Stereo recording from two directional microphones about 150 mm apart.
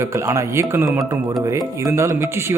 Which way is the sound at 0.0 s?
20° right (ahead or behind).